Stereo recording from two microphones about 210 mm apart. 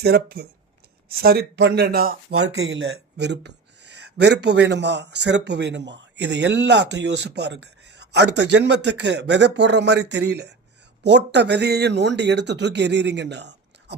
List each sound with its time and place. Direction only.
0.0 s speech: 50° right (ahead or behind)
2.3 s a man's voice: 80° right; by 13.9 s 55° right (ahead or behind)